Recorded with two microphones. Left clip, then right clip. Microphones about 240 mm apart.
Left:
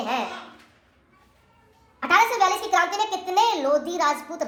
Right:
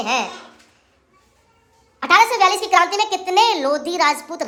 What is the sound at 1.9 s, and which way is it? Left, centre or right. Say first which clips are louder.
A woman's voice: right 5 dB; right.